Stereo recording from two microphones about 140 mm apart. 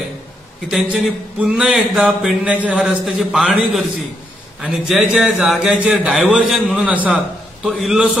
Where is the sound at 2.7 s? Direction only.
Centre (ahead or behind).